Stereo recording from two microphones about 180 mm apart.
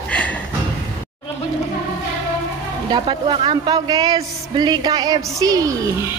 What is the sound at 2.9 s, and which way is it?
A man's voice, 25° right (ahead or behind).